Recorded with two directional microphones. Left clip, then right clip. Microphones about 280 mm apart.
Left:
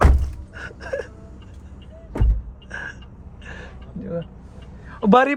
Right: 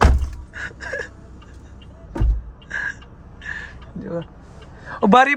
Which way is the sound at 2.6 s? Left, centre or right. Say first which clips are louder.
Right 7 dB; centre.